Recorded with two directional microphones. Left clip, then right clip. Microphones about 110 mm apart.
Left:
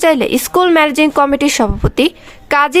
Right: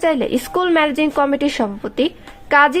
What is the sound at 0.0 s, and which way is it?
A woman's voice, 35° left (ahead or behind).